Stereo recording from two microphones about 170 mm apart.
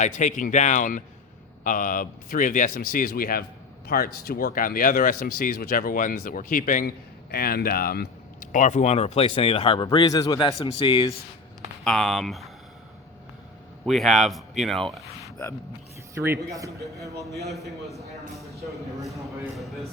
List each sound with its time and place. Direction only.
0.0 s speech: 45° left (ahead or behind); by 11.1 s 30° left (ahead or behind)
11.9 s speech: centre (ahead or behind)
13.8 s speech: centre (ahead or behind)
16.1 s speech: 15° right (ahead or behind)
17.5 s speech: centre (ahead or behind)